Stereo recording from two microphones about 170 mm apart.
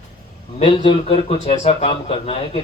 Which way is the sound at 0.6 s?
30° left (ahead or behind).